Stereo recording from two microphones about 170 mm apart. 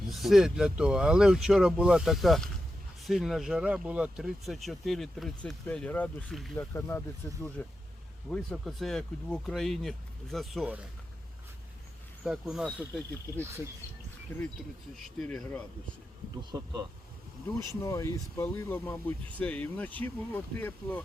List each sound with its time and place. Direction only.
0.1 s speech: centre (ahead or behind); by 7.5 s 15° left (ahead or behind)
8.3 s speech: centre (ahead or behind)
12.2 s speech: 5° right (ahead or behind)
14.3 s speech: 10° left (ahead or behind)
16.4 s speech: 25° right (ahead or behind)
17.8 s speech: 20° left (ahead or behind)